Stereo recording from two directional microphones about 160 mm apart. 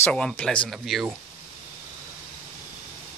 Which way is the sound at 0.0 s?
5° left (ahead or behind).